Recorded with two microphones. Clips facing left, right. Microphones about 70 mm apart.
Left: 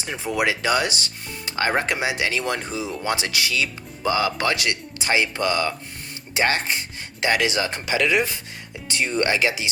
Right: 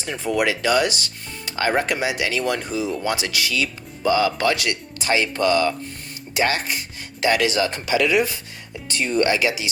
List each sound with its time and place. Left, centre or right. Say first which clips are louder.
0.2 s speech: right 2 dB; centre
6.3 s speech: even; left